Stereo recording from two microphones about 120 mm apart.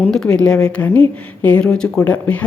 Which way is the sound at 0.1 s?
5° left (ahead or behind).